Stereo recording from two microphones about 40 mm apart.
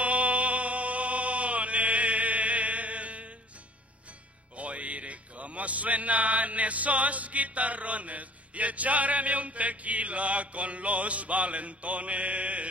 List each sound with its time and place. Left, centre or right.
0.0 s chant: right
4.6 s music: right